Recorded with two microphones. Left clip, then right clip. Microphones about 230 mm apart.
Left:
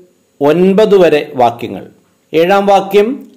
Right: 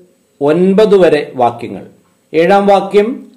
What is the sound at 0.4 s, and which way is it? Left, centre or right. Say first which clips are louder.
A man's voice: left 1 dB; left.